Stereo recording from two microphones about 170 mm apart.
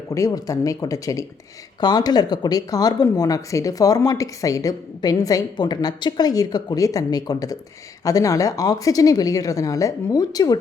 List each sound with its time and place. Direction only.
0.1 s speech: 20° left (ahead or behind)